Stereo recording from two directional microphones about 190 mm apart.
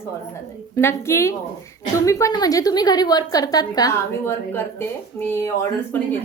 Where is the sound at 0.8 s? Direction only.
15° left (ahead or behind).